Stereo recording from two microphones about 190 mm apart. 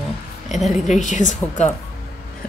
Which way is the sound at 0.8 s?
40° left (ahead or behind).